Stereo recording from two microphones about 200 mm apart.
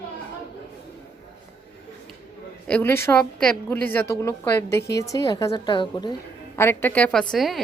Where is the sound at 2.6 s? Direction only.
10° left (ahead or behind).